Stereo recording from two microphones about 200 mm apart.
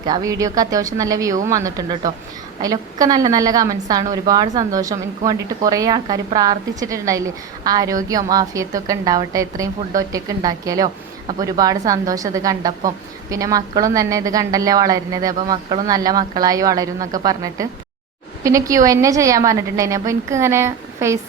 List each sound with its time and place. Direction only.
0.0 s a woman's voice: 20° right (ahead or behind)